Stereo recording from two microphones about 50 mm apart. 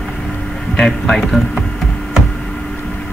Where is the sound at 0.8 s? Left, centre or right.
Centre.